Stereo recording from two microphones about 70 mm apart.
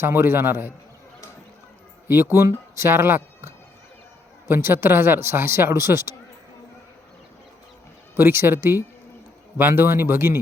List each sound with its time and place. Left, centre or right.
0.0 s speech: right
2.0 s speech: right
2.7 s speech: right
4.4 s speech: right
8.1 s speech: right